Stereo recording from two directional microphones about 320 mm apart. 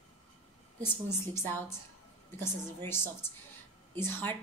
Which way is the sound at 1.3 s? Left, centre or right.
Centre.